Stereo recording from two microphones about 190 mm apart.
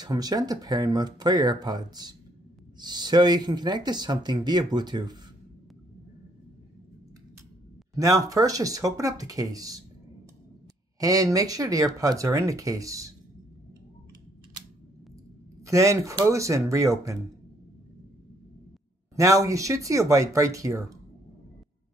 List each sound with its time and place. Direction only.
0.0 s speech: 20° right (ahead or behind)
7.9 s speech: 15° right (ahead or behind)
11.0 s speech: 20° right (ahead or behind)
15.6 s speech: 15° right (ahead or behind)
19.1 s speech: 15° right (ahead or behind)